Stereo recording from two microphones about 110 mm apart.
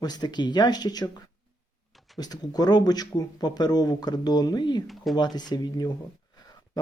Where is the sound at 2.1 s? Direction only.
35° left (ahead or behind).